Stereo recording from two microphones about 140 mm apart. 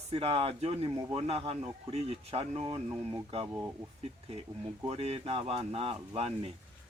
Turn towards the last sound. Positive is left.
turn(degrees=-45)  # may be behind; listen again after turning